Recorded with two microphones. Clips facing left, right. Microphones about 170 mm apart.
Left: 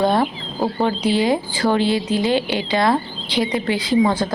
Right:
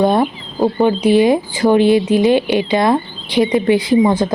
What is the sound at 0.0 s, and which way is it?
Speech, 20° right (ahead or behind).